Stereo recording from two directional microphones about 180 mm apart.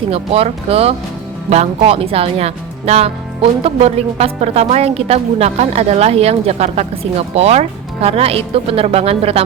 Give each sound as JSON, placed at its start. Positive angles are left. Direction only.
{"t": 0.1, "sound": "speech", "side_deg": -35}